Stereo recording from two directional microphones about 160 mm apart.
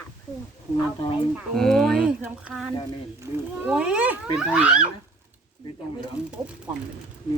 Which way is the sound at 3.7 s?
5° right (ahead or behind).